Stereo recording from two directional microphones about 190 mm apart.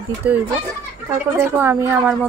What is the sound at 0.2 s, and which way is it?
A woman's voice, 5° right (ahead or behind).